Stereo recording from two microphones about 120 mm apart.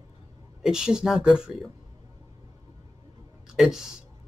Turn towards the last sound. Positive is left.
turn(degrees=-5)  # may be behind; listen again after turning